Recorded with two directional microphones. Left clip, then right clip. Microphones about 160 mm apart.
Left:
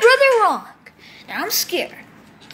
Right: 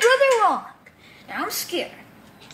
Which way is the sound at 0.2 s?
15° left (ahead or behind).